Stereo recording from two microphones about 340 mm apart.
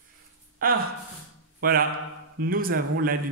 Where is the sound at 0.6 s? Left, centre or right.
Right.